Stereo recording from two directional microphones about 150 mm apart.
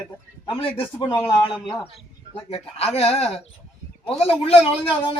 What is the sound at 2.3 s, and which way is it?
A man's voice, 40° left (ahead or behind).